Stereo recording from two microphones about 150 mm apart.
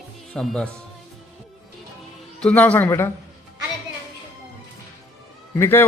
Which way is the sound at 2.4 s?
10° left (ahead or behind).